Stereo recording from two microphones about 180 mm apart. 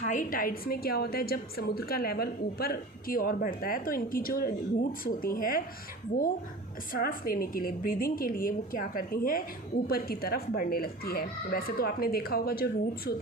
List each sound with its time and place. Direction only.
0.0 s a woman's voice: 45° left (ahead or behind)
6.9 s a woman's voice: 50° left (ahead or behind)